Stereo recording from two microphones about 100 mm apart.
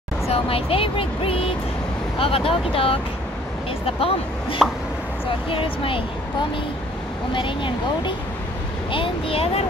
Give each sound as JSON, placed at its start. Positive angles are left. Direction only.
{"t": 0.3, "sound": "speech", "side_deg": 70}
{"t": 7.3, "sound": "speech", "side_deg": 55}